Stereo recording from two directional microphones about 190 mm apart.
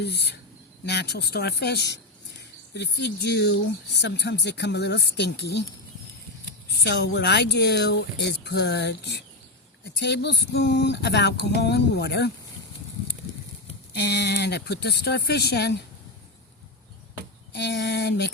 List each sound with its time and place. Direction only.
0.0 s speech: 60° left (ahead or behind)
6.8 s speech: 60° left (ahead or behind)
13.9 s speech: 60° left (ahead or behind)
17.5 s speech: 65° left (ahead or behind)